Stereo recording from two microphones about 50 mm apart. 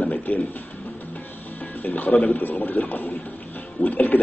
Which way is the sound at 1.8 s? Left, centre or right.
Left.